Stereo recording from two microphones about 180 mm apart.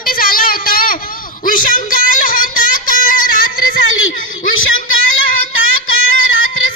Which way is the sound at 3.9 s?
90° left.